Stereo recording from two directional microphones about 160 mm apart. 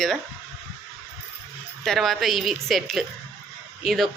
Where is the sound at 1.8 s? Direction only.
Centre (ahead or behind).